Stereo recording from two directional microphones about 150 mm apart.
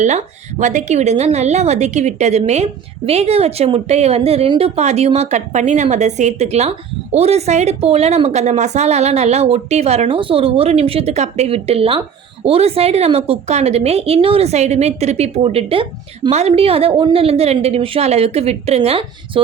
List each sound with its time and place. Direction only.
0.6 s a woman's voice: 50° right (ahead or behind)